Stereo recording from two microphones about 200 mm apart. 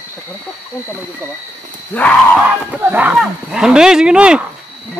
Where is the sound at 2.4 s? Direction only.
10° right (ahead or behind).